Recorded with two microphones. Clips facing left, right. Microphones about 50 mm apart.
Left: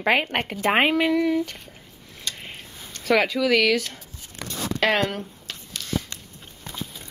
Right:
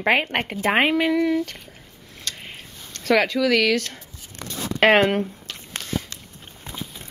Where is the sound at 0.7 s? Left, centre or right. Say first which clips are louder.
Right 1 dB; centre.